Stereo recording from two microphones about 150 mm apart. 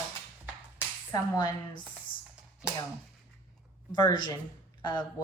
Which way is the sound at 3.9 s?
30° left (ahead or behind).